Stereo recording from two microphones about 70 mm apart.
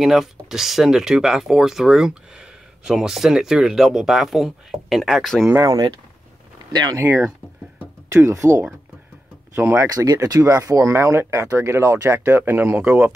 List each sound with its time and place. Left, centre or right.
0.0 s speech: centre
6.7 s speech: right
7.0 s speech: right
8.1 s speech: right
9.8 s speech: right